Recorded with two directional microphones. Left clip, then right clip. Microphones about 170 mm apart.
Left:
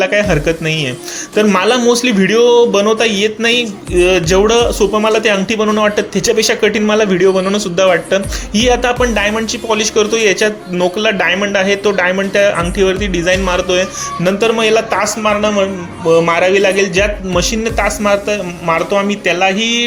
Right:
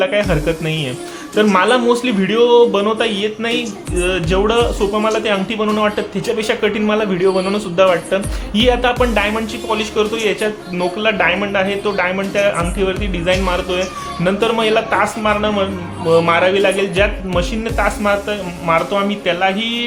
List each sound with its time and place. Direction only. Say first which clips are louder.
0.0 s speech: left 3 dB; 15° left (ahead or behind)